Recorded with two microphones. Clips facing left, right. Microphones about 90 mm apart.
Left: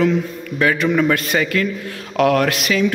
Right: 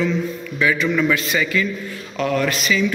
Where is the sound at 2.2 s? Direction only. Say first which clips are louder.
Left 5 dB; 70° left (ahead or behind).